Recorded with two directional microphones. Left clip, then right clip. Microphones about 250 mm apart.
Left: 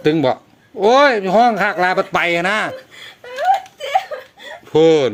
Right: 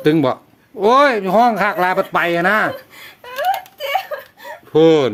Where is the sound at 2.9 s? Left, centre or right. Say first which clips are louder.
Left 1 dB; right.